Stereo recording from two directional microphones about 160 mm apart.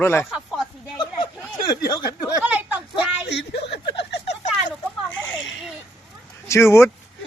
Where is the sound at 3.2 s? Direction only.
90° left.